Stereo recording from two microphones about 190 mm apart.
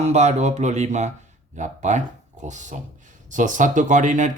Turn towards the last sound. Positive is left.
turn(degrees=-40)  # may be behind; listen again after turning